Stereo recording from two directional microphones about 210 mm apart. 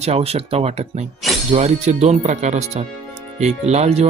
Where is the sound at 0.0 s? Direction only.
30° right (ahead or behind).